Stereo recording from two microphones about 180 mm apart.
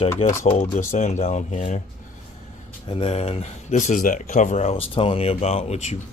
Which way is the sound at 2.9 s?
30° left (ahead or behind).